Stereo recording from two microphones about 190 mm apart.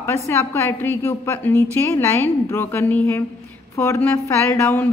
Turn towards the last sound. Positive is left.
turn(degrees=15)  # may be behind; listen again after turning